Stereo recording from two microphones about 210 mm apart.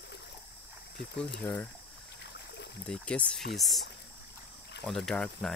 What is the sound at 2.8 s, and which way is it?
Speech, 5° left (ahead or behind).